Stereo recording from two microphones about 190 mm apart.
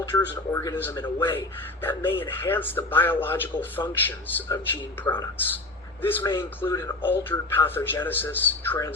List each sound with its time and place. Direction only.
0.1 s speech: 15° left (ahead or behind)